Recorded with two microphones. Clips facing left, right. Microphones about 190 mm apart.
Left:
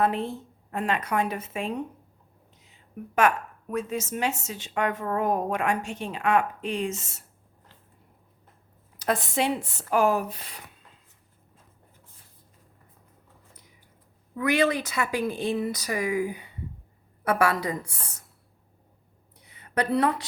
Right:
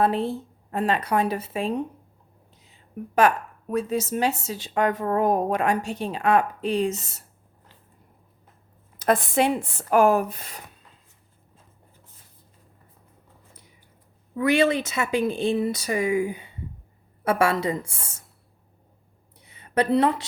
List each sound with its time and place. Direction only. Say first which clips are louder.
0.0 s a woman's voice: right 3 dB; 35° right (ahead or behind)
3.2 s a woman's voice: right 3 dB; 35° right (ahead or behind)
9.0 s speech: right 5 dB; 50° right (ahead or behind)
14.3 s speech: right 3 dB; 25° right (ahead or behind)
19.4 s a sound: right 4 dB; 25° right (ahead or behind)